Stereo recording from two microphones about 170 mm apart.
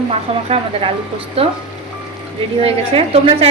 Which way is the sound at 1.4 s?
35° right (ahead or behind).